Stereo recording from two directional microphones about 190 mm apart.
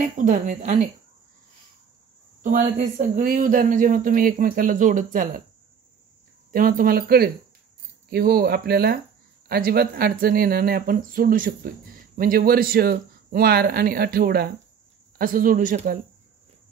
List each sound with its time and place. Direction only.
0.0 s speech: 40° right (ahead or behind)
2.4 s speech: 45° right (ahead or behind)
6.5 s speech: 45° right (ahead or behind)